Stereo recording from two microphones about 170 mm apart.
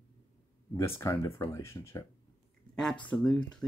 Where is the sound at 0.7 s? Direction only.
15° left (ahead or behind).